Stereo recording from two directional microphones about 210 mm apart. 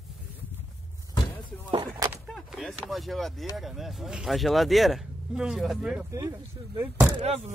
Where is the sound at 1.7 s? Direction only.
20° right (ahead or behind).